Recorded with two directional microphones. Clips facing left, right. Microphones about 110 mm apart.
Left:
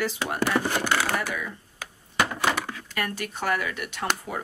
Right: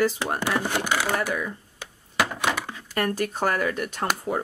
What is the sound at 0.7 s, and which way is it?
Speech, 15° right (ahead or behind).